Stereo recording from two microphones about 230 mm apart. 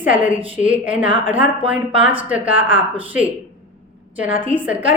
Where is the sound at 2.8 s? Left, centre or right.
Right.